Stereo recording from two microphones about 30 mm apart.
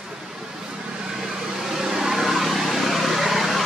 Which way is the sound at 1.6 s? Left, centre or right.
Centre.